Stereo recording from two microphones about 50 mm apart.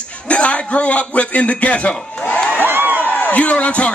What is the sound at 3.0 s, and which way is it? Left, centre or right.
Speech, left.